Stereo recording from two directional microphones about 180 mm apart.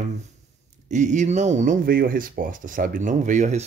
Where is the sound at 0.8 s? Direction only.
40° right (ahead or behind).